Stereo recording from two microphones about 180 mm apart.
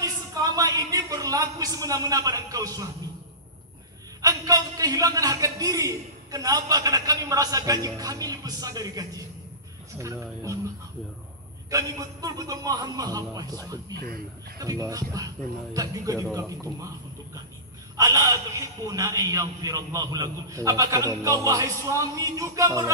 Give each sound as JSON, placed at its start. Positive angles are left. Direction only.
{"t": 0.0, "sound": "speech", "side_deg": -20}
{"t": 4.2, "sound": "a man's voice", "side_deg": -20}
{"t": 11.7, "sound": "a man's voice", "side_deg": -20}
{"t": 13.9, "sound": "speech", "side_deg": -55}
{"t": 14.6, "sound": "a man's voice", "side_deg": -20}